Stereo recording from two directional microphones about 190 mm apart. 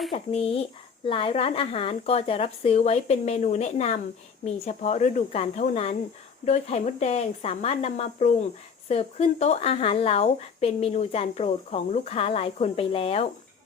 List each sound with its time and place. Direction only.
0.1 s speech: 30° left (ahead or behind)